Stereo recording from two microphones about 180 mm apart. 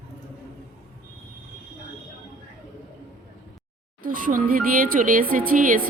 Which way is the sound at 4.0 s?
50° right (ahead or behind).